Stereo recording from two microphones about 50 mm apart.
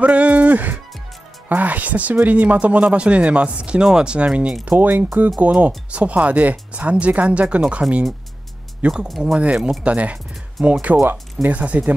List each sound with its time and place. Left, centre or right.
0.0 s music: right
1.5 s speech: right
4.6 s speech: right
8.8 s speech: right
9.2 s speech: centre
9.8 s speech: right